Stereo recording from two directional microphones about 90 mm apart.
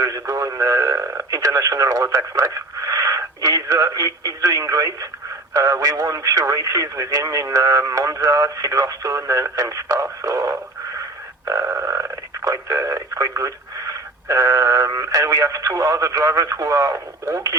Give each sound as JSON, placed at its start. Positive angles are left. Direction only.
{"t": 0.0, "sound": "speech", "side_deg": -40}